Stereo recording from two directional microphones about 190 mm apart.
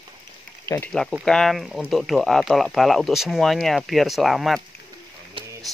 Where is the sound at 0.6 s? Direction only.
15° left (ahead or behind).